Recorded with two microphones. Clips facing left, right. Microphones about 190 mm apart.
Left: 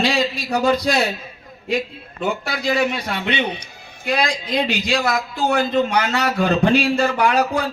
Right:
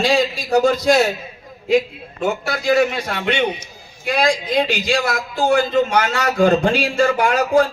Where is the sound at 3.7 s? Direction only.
60° left (ahead or behind).